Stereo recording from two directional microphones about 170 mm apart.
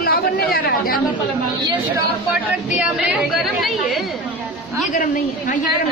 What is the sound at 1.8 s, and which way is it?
A woman's voice, 5° right (ahead or behind).